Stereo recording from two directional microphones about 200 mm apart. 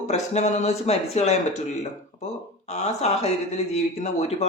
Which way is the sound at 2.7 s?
35° left (ahead or behind).